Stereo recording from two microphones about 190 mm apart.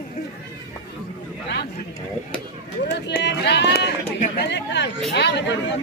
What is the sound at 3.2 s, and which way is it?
Music, 60° left (ahead or behind).